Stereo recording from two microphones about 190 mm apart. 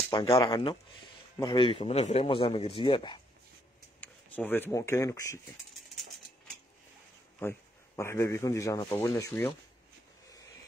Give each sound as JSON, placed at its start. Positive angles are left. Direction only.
{"t": 0.1, "sound": "a man's voice", "side_deg": 25}
{"t": 4.0, "sound": "speech", "side_deg": 10}
{"t": 7.3, "sound": "speech", "side_deg": 15}